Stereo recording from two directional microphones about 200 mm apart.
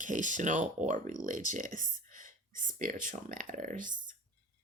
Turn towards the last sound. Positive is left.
turn(degrees=-40)  # may be behind; listen again after turning